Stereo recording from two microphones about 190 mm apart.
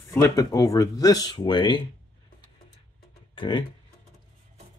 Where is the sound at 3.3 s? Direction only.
25° left (ahead or behind).